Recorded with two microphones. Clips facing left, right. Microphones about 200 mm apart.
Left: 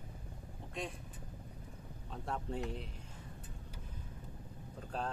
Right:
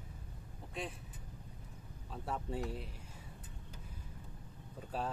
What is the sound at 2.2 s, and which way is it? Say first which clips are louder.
Speech: even; 5° right (ahead or behind).